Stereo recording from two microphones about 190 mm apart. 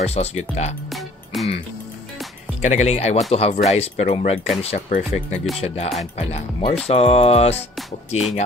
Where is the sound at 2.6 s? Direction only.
35° left (ahead or behind).